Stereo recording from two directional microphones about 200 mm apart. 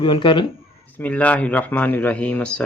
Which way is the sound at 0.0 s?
25° left (ahead or behind).